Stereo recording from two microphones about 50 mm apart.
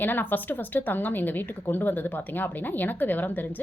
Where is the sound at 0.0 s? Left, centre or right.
Left.